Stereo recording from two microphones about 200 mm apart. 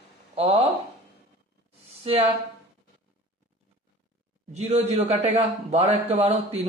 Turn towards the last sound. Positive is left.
turn(degrees=-30)  # may be behind; listen again after turning